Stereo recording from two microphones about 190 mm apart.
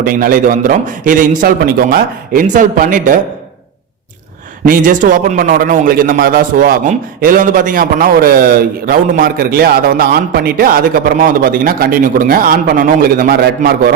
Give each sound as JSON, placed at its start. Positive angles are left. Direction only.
{"t": 0.0, "sound": "a man's voice", "side_deg": -50}
{"t": 4.6, "sound": "a man's voice", "side_deg": -45}